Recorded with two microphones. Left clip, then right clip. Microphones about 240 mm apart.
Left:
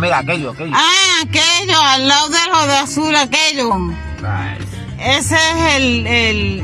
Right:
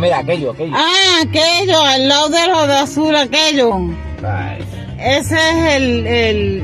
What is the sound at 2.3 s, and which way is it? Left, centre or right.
Speech, left.